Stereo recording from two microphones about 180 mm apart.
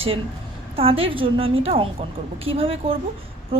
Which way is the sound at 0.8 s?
30° right (ahead or behind).